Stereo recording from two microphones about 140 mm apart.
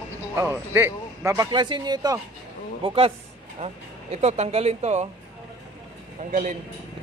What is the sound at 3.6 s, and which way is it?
Speech, 50° right (ahead or behind).